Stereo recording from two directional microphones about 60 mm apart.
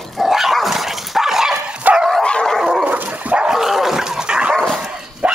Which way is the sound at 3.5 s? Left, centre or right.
Centre.